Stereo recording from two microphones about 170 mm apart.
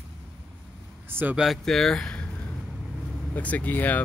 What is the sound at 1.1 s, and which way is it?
Speech, 10° right (ahead or behind).